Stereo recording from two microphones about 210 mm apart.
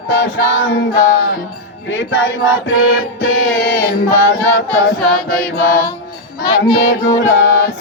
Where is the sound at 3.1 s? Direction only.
45° left (ahead or behind).